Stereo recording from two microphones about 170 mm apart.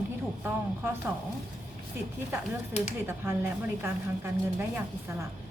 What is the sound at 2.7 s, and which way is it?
Speech, 45° left (ahead or behind).